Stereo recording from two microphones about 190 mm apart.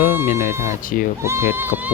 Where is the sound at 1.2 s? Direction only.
15° right (ahead or behind).